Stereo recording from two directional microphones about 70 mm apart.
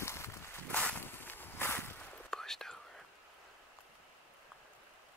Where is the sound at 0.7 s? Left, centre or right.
Centre.